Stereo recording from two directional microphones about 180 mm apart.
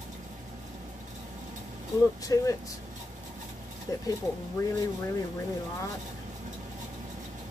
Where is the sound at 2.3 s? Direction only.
20° left (ahead or behind).